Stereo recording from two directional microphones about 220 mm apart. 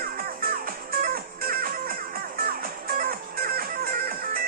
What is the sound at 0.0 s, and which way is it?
Music, 40° right (ahead or behind).